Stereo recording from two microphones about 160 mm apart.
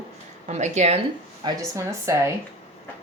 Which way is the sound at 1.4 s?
20° right (ahead or behind).